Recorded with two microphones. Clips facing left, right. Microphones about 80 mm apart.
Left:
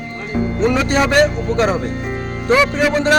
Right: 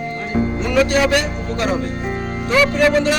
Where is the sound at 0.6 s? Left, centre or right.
Left.